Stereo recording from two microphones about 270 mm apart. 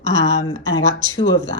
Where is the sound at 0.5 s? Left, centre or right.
Right.